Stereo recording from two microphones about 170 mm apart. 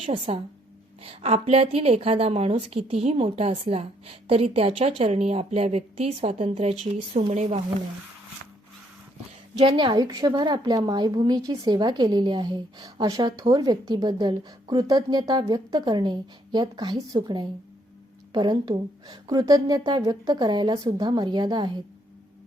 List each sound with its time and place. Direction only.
0.0 s a woman's voice: 35° right (ahead or behind)
9.6 s a woman's voice: 30° right (ahead or behind)